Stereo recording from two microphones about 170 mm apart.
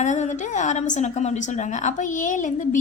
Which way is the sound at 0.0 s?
45° left (ahead or behind).